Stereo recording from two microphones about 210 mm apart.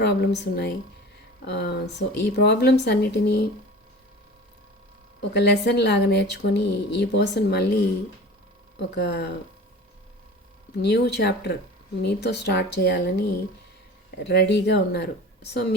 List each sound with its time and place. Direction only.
0.0 s a woman's voice: 50° left (ahead or behind)
5.3 s a woman's voice: 55° left (ahead or behind)
9.0 s a woman's voice: 55° left (ahead or behind)
10.8 s a woman's voice: 50° left (ahead or behind)